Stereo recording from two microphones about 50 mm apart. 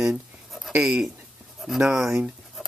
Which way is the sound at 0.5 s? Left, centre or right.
Centre.